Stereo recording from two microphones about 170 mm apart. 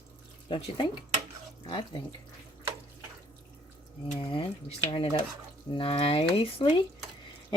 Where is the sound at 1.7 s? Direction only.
25° left (ahead or behind).